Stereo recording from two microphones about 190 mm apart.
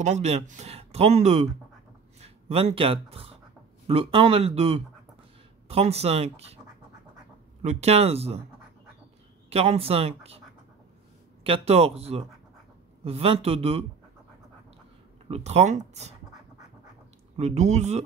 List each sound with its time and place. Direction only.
0.0 s speech: 35° right (ahead or behind)
7.6 s speech: 35° right (ahead or behind)
9.5 s speech: 30° right (ahead or behind)
11.4 s speech: 30° right (ahead or behind)
15.2 s speech: 35° right (ahead or behind)
17.4 s speech: 35° right (ahead or behind)